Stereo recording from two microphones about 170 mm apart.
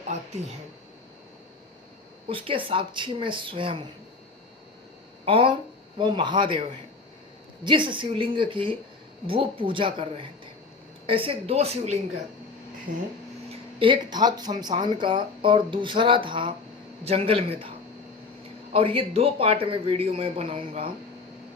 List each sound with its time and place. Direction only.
2.3 s speech: 30° right (ahead or behind)
5.2 s speech: 30° right (ahead or behind)
13.5 s speech: 30° right (ahead or behind)
18.7 s speech: 35° right (ahead or behind)